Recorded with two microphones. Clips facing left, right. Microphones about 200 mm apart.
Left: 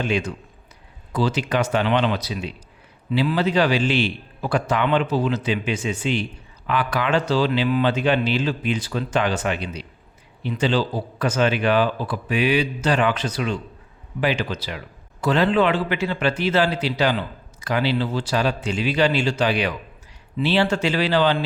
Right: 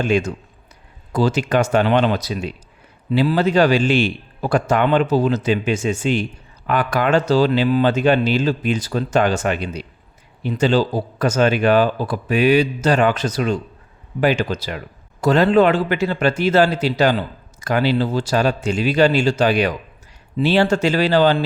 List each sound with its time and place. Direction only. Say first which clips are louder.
0.0 s a man's voice: right 5 dB; 45° right (ahead or behind)